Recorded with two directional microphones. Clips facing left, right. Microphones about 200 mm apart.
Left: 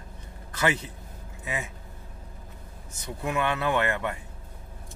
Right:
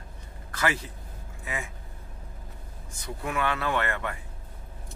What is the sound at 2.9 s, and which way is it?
Speech, 25° left (ahead or behind).